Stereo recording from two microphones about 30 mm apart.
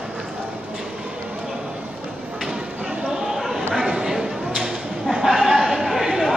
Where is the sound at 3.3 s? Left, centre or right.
Centre.